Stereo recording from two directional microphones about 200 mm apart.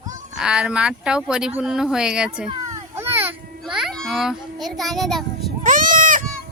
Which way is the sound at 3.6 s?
Centre (ahead or behind).